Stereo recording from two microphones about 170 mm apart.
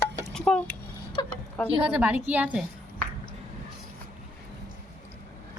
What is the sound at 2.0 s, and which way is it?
Speech, 10° right (ahead or behind).